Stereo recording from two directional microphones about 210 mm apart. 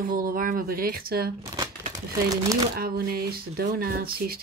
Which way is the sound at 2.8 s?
45° right (ahead or behind).